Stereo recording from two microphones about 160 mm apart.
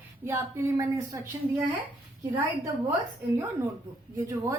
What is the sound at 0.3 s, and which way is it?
Speech, 20° right (ahead or behind).